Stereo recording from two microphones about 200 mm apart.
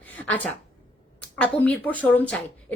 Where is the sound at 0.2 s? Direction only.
5° left (ahead or behind).